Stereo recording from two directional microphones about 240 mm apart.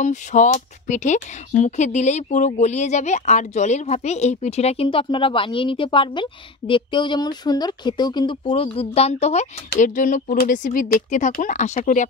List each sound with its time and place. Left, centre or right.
0.0 s speech: left